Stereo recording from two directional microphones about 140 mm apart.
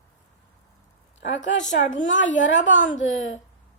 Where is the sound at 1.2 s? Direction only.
60° left (ahead or behind).